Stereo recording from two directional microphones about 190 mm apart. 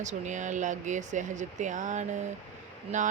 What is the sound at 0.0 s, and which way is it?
Speech, 40° right (ahead or behind).